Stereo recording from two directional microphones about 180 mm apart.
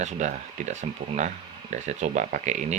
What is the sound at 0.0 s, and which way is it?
Speech, 40° right (ahead or behind).